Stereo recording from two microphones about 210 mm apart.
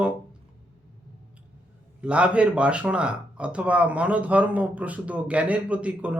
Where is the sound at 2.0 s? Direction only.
5° right (ahead or behind).